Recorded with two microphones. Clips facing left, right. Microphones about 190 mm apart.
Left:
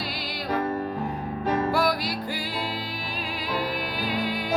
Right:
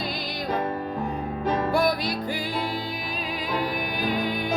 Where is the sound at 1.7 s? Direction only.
20° right (ahead or behind).